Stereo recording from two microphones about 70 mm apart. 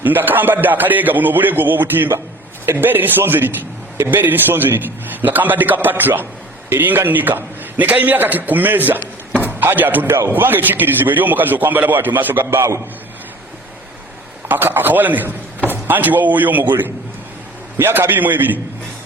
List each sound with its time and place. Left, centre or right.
0.0 s a man's voice: right
14.4 s a man's voice: right